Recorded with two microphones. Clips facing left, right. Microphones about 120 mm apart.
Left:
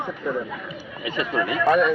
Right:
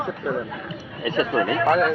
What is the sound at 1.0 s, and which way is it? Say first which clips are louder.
Speech: right 4 dB; 40° right (ahead or behind).